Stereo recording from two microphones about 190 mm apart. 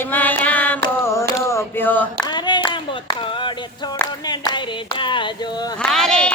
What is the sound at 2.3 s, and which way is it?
Clapping, 25° left (ahead or behind).